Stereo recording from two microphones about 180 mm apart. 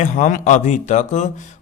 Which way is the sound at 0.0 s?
45° left (ahead or behind).